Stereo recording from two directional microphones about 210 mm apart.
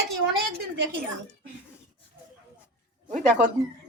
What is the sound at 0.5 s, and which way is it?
Speech, 60° right (ahead or behind).